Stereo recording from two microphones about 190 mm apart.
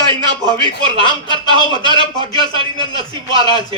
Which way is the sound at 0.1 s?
25° right (ahead or behind).